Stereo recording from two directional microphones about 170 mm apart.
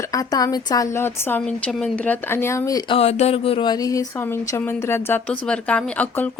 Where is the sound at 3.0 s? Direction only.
40° left (ahead or behind).